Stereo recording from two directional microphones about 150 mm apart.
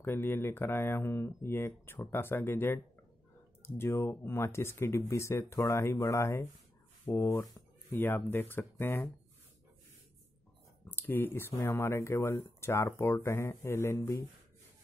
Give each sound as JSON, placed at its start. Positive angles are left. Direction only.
{"t": 0.0, "sound": "speech", "side_deg": 15}
{"t": 10.9, "sound": "speech", "side_deg": 15}